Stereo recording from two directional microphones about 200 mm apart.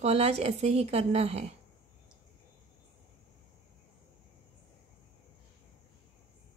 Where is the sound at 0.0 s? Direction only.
30° right (ahead or behind).